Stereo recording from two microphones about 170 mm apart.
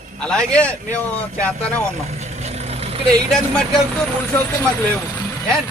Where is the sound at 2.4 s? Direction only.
40° right (ahead or behind).